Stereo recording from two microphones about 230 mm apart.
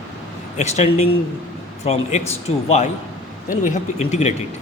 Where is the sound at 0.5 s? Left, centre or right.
Left.